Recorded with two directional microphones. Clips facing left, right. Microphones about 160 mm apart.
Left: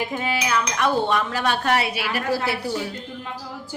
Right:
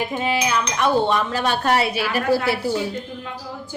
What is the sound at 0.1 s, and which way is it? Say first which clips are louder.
A woman's voice: right 2 dB; 25° right (ahead or behind).